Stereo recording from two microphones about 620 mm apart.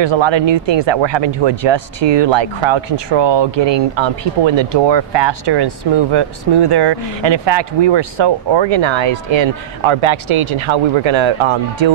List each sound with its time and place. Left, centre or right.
0.0 s speech: right